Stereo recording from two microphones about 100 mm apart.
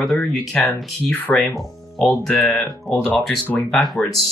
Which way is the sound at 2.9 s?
15° left (ahead or behind).